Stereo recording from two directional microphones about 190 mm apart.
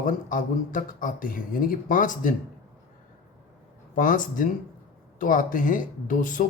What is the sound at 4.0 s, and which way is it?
Speech, 45° left (ahead or behind).